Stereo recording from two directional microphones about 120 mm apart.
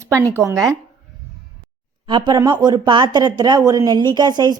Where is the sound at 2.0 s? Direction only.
40° right (ahead or behind).